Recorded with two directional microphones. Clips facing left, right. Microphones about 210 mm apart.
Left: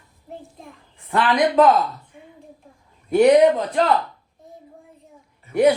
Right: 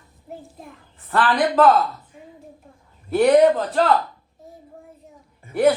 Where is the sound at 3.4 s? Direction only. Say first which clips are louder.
Even; centre (ahead or behind).